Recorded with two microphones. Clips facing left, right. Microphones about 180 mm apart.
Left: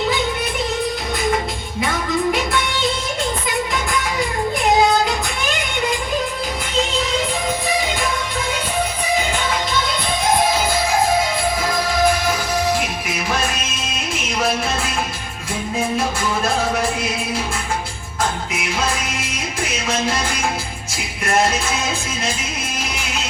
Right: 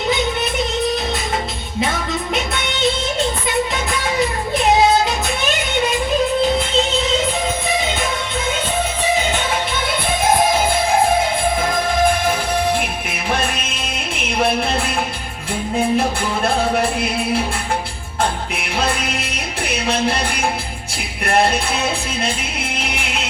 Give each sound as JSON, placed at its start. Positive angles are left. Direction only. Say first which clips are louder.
{"t": 1.8, "sound": "music", "louder": "left 2 dB", "side_deg": -25}
{"t": 11.7, "sound": "music", "louder": "left 1 dB", "side_deg": -50}
{"t": 16.7, "sound": "music", "louder": "right 3 dB", "side_deg": -60}
{"t": 18.9, "sound": "music", "louder": "right 2 dB", "side_deg": -60}
{"t": 22.7, "sound": "music", "louder": "right 2 dB", "side_deg": -60}